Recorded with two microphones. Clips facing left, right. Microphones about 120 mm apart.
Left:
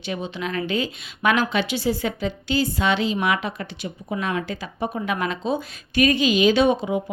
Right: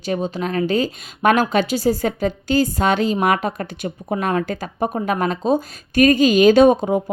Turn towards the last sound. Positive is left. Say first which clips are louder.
# right 6 dB
turn(degrees=-45)  # may be behind; listen again after turning